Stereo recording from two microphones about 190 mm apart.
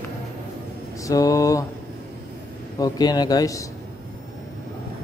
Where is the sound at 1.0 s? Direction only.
15° left (ahead or behind).